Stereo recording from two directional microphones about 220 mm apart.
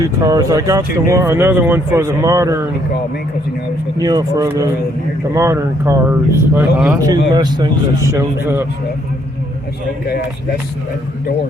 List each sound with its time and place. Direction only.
0.0 s speech: 15° right (ahead or behind)
4.0 s speech: 15° right (ahead or behind)
7.0 s speech: 20° right (ahead or behind)